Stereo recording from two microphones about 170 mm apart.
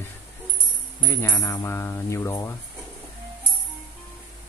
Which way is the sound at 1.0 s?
20° left (ahead or behind).